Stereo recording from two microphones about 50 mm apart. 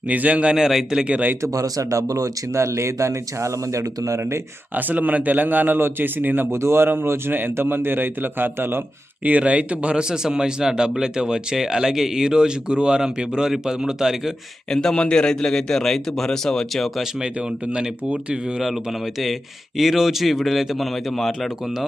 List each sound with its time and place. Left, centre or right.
0.1 s speech: right
0.5 s a man's voice: centre
1.0 s speech: right
1.4 s speech: right
2.5 s speech: right
4.7 s a man's voice: right
6.5 s speech: right
9.2 s a man's voice: right; by 14.3 s centre
14.7 s a man's voice: centre
17.7 s speech: right
19.2 s a man's voice: centre